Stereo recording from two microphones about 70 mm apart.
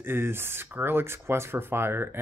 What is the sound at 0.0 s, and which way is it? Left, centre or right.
Speech, right.